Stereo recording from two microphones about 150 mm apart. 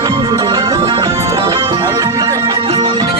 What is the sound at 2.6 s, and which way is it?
Music, 40° right (ahead or behind).